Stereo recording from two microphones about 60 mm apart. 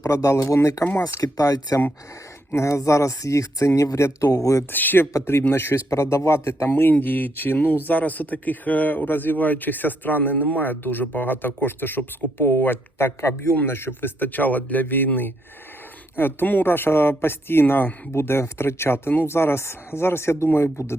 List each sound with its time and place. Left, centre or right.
0.0 s speech: left
1.2 s speech: left
2.6 s speech: left
4.7 s speech: left
5.9 s speech: left